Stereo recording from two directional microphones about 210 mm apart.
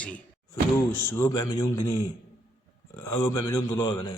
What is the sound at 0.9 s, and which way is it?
Speech, 10° left (ahead or behind).